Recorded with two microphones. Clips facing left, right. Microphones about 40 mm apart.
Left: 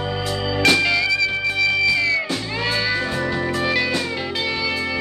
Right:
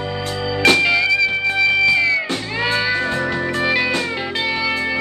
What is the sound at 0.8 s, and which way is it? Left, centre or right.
Music, centre.